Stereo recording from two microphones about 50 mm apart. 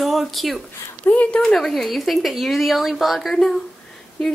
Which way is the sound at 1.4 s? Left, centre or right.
Centre.